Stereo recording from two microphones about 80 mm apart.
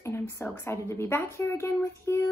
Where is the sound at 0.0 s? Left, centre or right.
Left.